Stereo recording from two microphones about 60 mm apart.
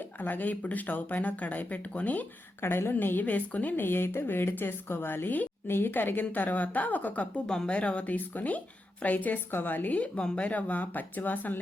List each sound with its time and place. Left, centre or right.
0.2 s a woman's voice: left
2.6 s a woman's voice: left
7.4 s speech: centre
7.8 s a woman's voice: left